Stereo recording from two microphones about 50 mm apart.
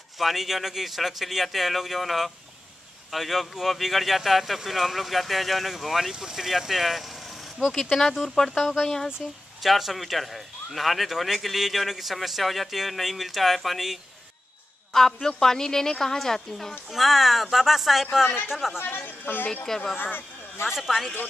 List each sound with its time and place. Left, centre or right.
0.2 s speech: centre
7.7 s a woman's voice: centre
16.9 s speech: centre
18.8 s a woman's voice: left
19.5 s a woman's voice: centre
20.0 s speech: left
20.6 s speech: centre